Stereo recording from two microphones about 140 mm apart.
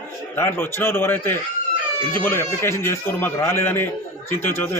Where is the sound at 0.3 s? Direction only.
15° left (ahead or behind).